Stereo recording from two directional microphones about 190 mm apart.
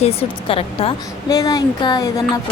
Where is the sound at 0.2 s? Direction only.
30° left (ahead or behind).